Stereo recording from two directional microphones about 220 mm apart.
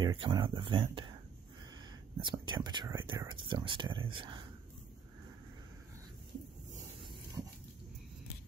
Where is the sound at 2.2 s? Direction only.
20° right (ahead or behind).